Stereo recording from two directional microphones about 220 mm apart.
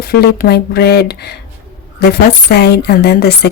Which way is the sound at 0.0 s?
45° left (ahead or behind).